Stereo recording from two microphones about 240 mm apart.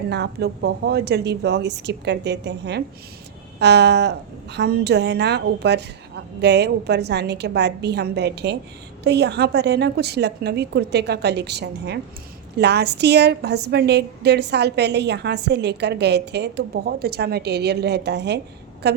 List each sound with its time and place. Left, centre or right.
0.1 s a woman's voice: right